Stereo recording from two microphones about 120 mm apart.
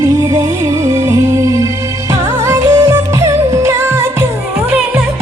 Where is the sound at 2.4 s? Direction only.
25° right (ahead or behind).